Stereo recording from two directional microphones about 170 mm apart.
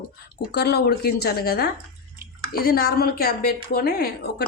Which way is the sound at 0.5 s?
75° left (ahead or behind).